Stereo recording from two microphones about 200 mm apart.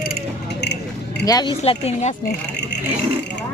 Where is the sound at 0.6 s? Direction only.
55° left (ahead or behind).